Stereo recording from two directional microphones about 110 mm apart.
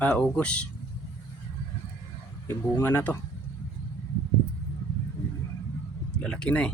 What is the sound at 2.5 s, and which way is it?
Speech, 20° left (ahead or behind).